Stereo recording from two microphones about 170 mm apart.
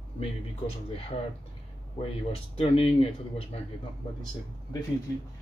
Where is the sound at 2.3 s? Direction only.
35° left (ahead or behind).